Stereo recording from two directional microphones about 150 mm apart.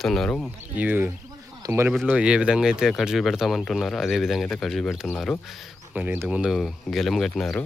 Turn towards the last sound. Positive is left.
turn(degrees=0)  # may be behind; listen again after turning